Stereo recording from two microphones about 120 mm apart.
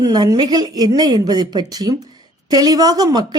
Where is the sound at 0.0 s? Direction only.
35° right (ahead or behind).